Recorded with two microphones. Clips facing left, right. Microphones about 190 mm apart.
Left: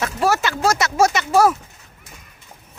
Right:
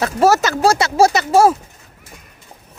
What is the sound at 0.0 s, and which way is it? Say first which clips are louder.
Speech: right 6 dB; 40° right (ahead or behind).